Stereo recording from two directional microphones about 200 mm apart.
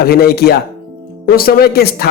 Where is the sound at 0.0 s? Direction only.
50° left (ahead or behind).